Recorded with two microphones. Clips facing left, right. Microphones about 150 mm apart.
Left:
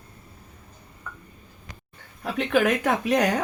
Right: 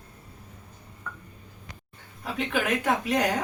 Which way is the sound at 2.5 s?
55° left (ahead or behind).